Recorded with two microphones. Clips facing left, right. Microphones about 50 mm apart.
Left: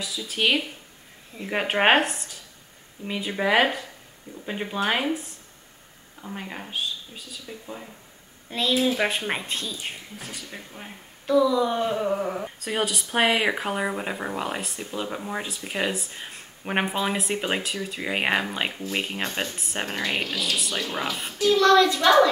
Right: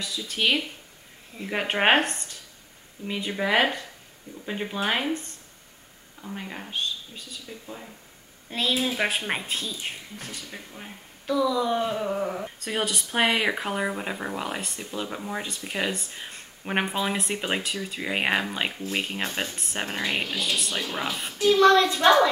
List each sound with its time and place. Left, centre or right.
0.0 s speech: centre
8.5 s speech: centre
21.4 s a child's voice: centre